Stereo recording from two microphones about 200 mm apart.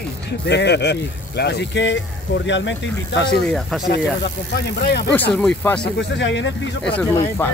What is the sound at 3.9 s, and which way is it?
Speech, 55° left (ahead or behind).